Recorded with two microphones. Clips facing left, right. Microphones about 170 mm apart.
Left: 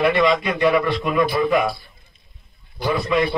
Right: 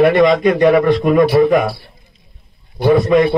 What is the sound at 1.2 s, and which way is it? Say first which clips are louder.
Speech: right 7 dB; 70° right (ahead or behind).